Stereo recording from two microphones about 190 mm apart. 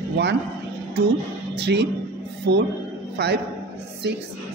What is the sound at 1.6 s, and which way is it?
A man's voice, 60° right (ahead or behind).